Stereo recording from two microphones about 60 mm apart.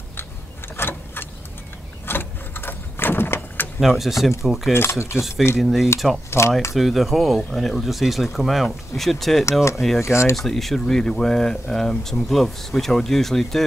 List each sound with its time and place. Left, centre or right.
0.7 s a sound: left
2.0 s vehicle: left
3.8 s speech: centre
4.7 s speech: left
5.6 s speech: centre
9.9 s speech: left
10.3 s speech: centre